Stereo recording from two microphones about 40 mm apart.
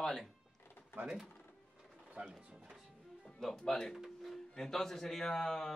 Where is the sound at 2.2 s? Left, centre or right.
Right.